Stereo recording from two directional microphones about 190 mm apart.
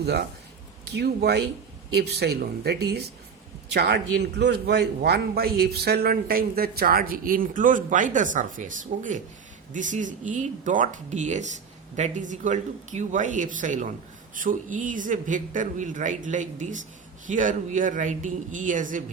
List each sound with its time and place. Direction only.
0.0 s a man's voice: 60° right (ahead or behind); by 19.0 s 45° right (ahead or behind)